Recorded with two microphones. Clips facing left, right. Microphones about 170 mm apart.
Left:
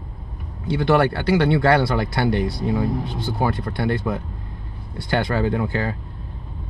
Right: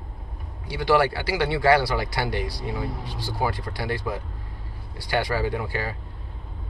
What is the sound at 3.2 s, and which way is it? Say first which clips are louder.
Speech: left 1 dB; 55° left (ahead or behind).